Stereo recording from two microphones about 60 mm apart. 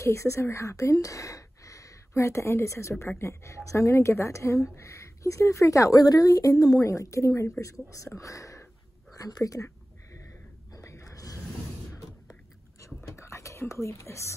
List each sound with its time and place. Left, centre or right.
0.0 s a woman's voice: left
9.1 s speech: left
10.1 s a sound: left
12.8 s whispering: left